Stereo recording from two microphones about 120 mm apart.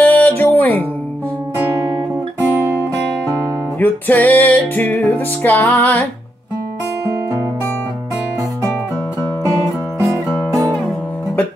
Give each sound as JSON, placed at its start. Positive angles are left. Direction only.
{"t": 0.0, "sound": "music", "side_deg": 15}
{"t": 3.8, "sound": "music", "side_deg": 15}
{"t": 9.9, "sound": "music", "side_deg": -25}